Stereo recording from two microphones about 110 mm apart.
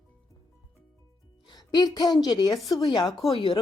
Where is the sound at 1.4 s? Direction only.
40° left (ahead or behind).